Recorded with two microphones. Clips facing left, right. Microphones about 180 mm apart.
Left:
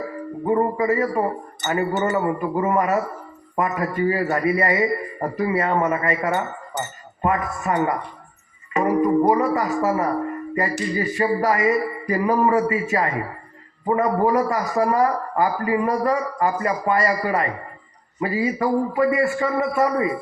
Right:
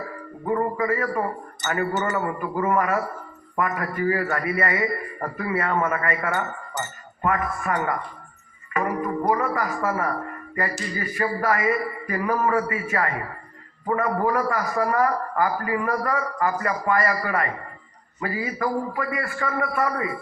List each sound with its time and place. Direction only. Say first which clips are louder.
0.4 s a man's voice: left 4 dB; 20° left (ahead or behind)